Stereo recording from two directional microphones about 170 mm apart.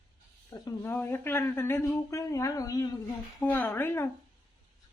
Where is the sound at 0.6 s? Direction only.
15° left (ahead or behind).